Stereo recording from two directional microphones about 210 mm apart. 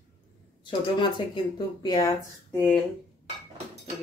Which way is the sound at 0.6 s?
20° left (ahead or behind).